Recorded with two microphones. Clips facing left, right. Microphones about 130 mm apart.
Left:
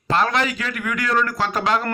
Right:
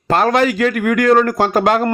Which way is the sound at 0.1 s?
45° right (ahead or behind).